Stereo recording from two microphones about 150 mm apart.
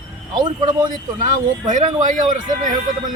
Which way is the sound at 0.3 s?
30° right (ahead or behind).